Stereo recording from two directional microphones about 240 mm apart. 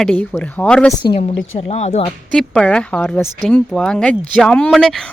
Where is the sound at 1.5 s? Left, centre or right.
Left.